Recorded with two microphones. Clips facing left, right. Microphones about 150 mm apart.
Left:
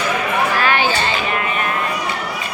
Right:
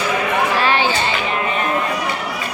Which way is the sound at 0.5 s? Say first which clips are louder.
Even; 30° right (ahead or behind).